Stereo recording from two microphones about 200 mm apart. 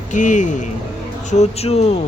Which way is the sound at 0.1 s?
40° left (ahead or behind).